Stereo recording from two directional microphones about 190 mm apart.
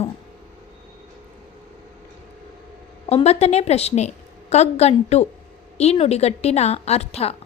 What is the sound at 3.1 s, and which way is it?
A woman's voice, 35° left (ahead or behind).